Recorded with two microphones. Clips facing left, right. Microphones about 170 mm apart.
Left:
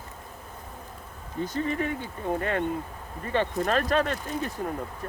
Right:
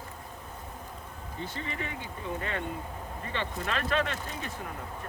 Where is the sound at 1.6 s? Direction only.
45° left (ahead or behind).